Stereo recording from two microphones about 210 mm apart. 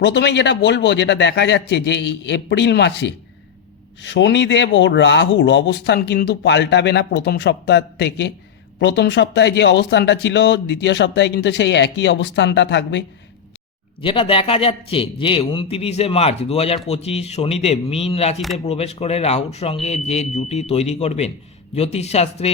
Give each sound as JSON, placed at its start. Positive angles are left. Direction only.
{"t": 0.0, "sound": "speech", "side_deg": 55}
{"t": 14.0, "sound": "a man's voice", "side_deg": 25}